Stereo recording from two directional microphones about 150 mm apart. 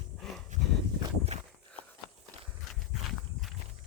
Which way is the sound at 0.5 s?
55° right (ahead or behind).